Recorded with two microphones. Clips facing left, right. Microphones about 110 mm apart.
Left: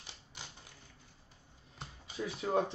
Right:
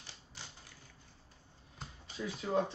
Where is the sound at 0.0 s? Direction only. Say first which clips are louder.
Left 1 dB; 20° left (ahead or behind).